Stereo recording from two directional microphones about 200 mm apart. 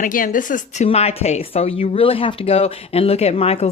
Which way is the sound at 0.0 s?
40° left (ahead or behind).